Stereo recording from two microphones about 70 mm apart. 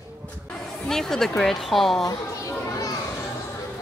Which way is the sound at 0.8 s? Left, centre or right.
Centre.